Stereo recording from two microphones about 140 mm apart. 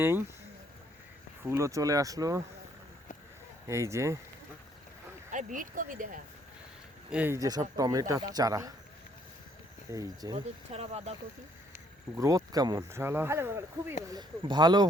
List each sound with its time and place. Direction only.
0.0 s speech: 15° right (ahead or behind)
1.5 s speech: 20° right (ahead or behind)
3.7 s speech: 20° right (ahead or behind)
5.3 s speech: 65° right (ahead or behind)
7.1 s speech: 10° right (ahead or behind)
7.3 s speech: 25° right (ahead or behind)
9.9 s speech: 25° right (ahead or behind)
10.7 s speech: 45° right (ahead or behind)
12.1 s speech: 25° right (ahead or behind)
14.1 s speech: 30° right (ahead or behind)